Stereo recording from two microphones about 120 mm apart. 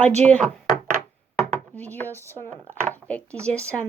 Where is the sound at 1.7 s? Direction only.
15° left (ahead or behind).